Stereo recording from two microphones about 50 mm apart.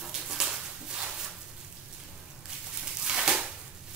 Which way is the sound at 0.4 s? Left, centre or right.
Centre.